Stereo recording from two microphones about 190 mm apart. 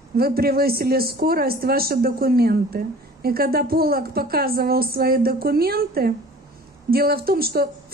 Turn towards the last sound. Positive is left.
turn(degrees=-55)  # may be behind; listen again after turning